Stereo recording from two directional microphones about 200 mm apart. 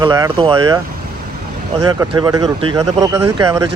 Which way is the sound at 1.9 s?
20° right (ahead or behind).